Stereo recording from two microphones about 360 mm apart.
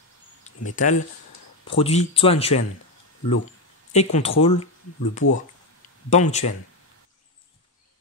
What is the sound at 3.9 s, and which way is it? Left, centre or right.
Speech, centre.